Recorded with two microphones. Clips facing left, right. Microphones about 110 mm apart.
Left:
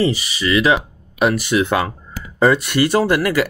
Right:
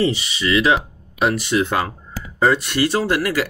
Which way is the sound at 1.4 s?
65° left (ahead or behind).